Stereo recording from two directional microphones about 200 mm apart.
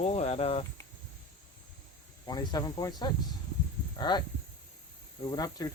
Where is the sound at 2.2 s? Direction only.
20° left (ahead or behind).